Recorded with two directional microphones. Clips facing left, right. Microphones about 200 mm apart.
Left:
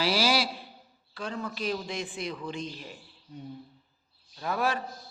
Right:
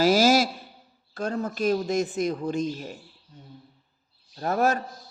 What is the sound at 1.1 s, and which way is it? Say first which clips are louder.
A man's voice: right 7 dB; 45° right (ahead or behind).